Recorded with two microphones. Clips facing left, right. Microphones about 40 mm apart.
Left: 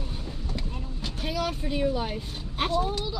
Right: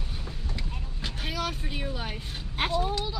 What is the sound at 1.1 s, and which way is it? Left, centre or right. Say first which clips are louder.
Vehicle: left 2 dB; right.